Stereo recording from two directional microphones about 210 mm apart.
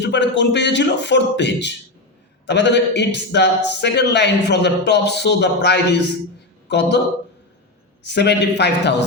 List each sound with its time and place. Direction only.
0.0 s a man's voice: 55° left (ahead or behind)
8.0 s a man's voice: 55° left (ahead or behind)